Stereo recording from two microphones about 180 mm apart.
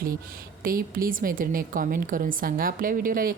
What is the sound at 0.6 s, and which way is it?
A woman's voice, 50° right (ahead or behind).